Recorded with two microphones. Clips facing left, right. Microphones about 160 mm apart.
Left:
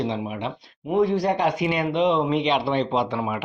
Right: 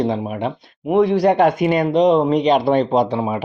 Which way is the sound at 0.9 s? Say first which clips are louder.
Right 7 dB; 70° right (ahead or behind).